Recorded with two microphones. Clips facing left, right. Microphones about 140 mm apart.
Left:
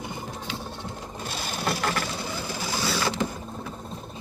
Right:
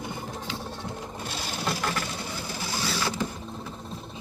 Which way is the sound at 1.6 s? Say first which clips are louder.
Left 2 dB; 60° left (ahead or behind).